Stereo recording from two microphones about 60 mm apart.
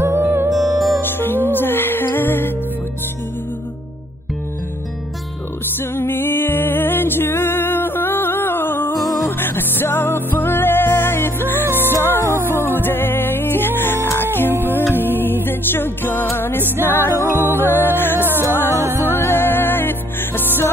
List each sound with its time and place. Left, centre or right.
0.0 s music: right
0.7 s music: centre
1.0 s music: left
5.8 s music: left
8.9 s music: centre
9.4 s music: left
18.2 s music: right
19.0 s music: left